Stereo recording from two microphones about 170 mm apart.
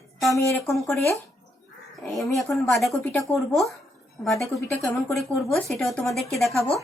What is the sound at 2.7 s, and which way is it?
Speech, centre (ahead or behind).